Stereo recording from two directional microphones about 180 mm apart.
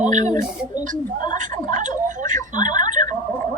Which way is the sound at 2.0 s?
45° right (ahead or behind).